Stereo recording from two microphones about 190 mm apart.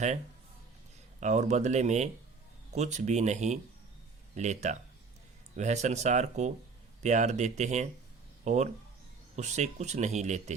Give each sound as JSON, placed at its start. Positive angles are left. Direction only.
{"t": 1.2, "sound": "speech", "side_deg": -40}